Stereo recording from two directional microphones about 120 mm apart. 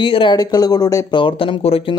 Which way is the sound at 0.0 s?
45° left (ahead or behind).